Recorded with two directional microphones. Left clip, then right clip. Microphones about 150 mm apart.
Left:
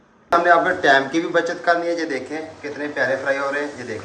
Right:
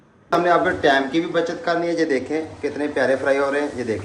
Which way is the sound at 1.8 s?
60° right (ahead or behind).